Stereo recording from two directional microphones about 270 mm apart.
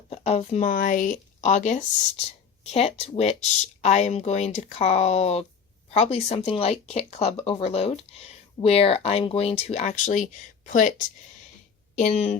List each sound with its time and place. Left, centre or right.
0.1 s speech: left
11.9 s speech: left